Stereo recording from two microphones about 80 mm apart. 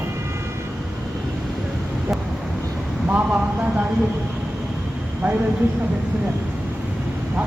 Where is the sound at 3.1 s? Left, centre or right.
Right.